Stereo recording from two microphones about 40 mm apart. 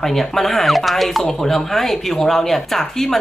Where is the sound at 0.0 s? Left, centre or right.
Centre.